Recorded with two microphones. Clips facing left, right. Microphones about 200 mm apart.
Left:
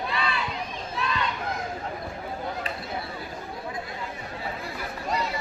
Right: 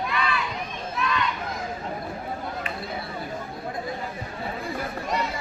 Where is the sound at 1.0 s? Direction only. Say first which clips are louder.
Right 3 dB; 30° left (ahead or behind).